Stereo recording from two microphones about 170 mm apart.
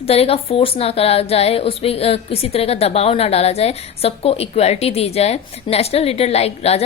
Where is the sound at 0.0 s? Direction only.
35° left (ahead or behind).